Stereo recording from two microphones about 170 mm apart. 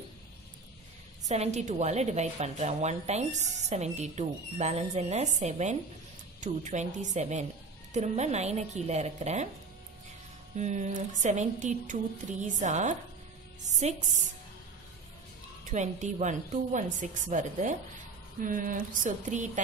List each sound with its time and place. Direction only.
1.3 s a woman's voice: 40° right (ahead or behind)
10.5 s a woman's voice: 40° right (ahead or behind)
15.6 s a woman's voice: 45° right (ahead or behind)